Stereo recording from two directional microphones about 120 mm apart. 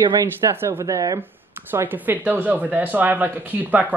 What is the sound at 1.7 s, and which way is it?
Speech, 15° right (ahead or behind).